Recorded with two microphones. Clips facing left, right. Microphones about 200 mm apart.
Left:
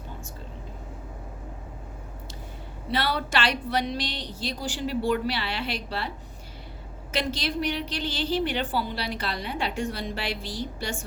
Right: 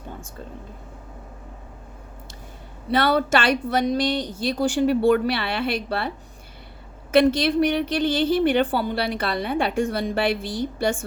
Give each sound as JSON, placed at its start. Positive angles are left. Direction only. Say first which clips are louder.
{"t": 2.9, "sound": "a woman's voice", "louder": "right 7 dB", "side_deg": -50}
{"t": 7.1, "sound": "a woman's voice", "louder": "right 12 dB", "side_deg": -55}